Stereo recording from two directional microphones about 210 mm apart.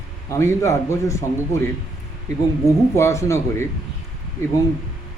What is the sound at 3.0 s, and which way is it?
Speech, 15° left (ahead or behind).